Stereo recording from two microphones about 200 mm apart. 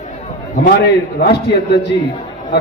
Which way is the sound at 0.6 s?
55° left (ahead or behind).